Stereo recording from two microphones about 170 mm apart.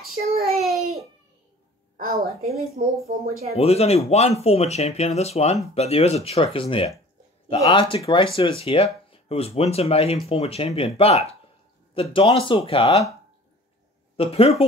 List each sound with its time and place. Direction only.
0.5 s child singing: centre (ahead or behind)
2.2 s speech: 65° right (ahead or behind)
3.5 s speech: 35° left (ahead or behind)
14.1 s speech: 35° left (ahead or behind)